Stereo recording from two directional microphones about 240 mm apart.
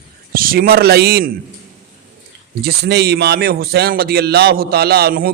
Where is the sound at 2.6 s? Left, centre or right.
Right.